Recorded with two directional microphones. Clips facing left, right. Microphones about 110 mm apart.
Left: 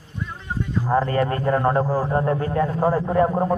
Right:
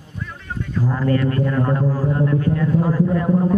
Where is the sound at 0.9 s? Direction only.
35° left (ahead or behind).